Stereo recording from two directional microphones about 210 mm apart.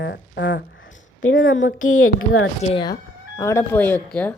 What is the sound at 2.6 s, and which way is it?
Speech, 25° left (ahead or behind).